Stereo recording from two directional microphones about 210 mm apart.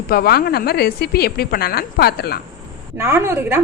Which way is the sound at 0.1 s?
45° left (ahead or behind).